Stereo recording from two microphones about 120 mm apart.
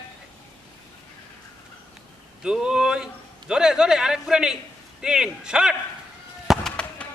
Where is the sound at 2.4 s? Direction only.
5° right (ahead or behind).